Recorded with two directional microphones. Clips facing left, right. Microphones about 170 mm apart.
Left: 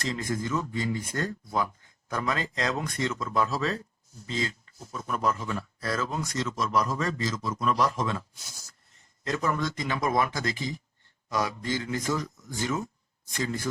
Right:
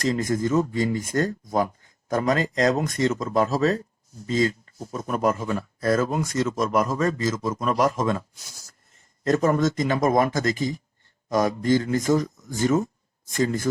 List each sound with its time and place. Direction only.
0.0 s speech: 45° right (ahead or behind)
9.2 s speech: 45° right (ahead or behind)